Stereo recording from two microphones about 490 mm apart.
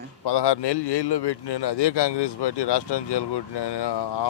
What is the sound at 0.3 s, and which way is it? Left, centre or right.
A man's voice, left.